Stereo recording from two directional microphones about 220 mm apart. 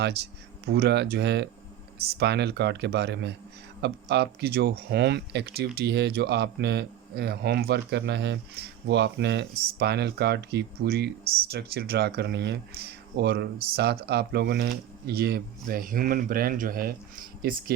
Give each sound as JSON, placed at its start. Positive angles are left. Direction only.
{"t": 0.6, "sound": "speech", "side_deg": -45}